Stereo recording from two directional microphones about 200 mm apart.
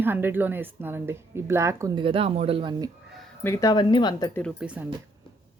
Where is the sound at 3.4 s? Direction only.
15° left (ahead or behind).